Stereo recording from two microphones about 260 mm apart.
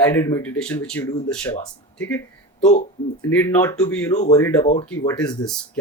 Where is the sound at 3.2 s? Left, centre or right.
Centre.